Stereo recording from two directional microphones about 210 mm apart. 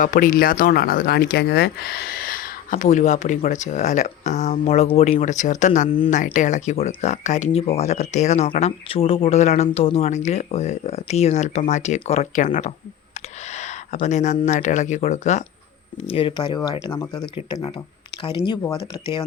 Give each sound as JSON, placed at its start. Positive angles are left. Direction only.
{"t": 0.0, "sound": "speech", "side_deg": 40}